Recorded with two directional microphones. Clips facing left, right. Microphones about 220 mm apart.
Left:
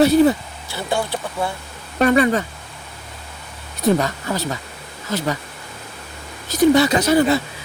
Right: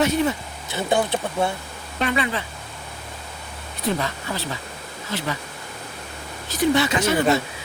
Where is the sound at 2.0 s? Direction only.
45° left (ahead or behind).